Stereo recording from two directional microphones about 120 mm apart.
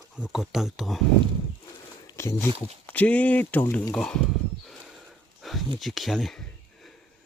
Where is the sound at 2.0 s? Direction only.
25° left (ahead or behind).